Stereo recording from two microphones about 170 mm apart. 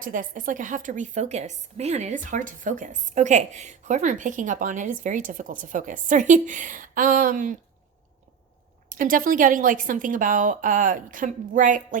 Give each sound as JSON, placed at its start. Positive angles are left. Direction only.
{"t": 0.0, "sound": "a woman's voice", "side_deg": -50}
{"t": 8.9, "sound": "a woman's voice", "side_deg": -55}